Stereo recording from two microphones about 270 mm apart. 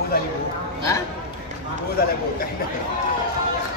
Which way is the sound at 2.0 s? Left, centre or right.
Left.